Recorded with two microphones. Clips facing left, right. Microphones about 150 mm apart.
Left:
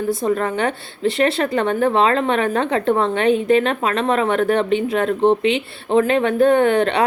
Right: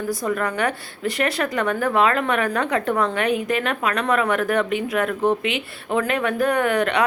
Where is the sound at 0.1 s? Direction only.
25° left (ahead or behind).